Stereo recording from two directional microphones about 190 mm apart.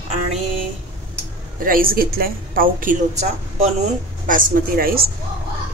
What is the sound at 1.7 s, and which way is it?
Speech, 50° right (ahead or behind).